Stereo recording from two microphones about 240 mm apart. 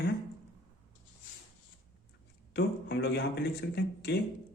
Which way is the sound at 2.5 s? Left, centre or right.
Left.